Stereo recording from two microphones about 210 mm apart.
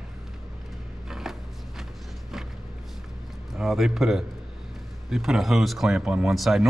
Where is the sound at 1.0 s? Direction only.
Centre (ahead or behind).